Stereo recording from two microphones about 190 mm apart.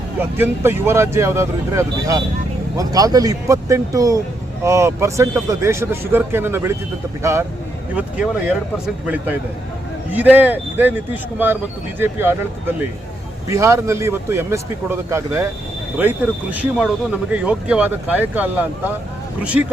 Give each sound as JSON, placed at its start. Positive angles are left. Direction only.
{"t": 0.2, "sound": "speech", "side_deg": -10}